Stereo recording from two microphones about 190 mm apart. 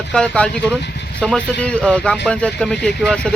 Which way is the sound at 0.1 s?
5° left (ahead or behind).